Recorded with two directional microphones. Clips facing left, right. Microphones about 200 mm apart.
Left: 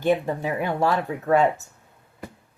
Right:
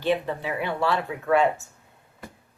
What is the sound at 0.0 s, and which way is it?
Speech, 45° left (ahead or behind).